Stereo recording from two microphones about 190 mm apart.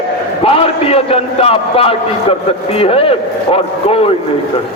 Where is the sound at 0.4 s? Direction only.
30° left (ahead or behind).